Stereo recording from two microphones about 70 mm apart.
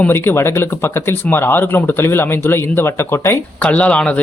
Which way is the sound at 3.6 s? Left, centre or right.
Centre.